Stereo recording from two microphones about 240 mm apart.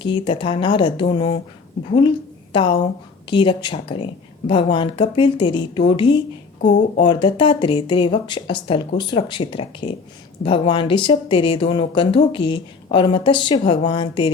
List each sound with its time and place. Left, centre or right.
0.0 s speech: left
2.0 s a sound: left
3.2 s speech: centre
6.6 s speech: left
7.0 s speech: centre